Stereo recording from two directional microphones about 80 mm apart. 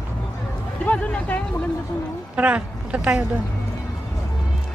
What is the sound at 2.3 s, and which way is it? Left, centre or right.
Speech, centre.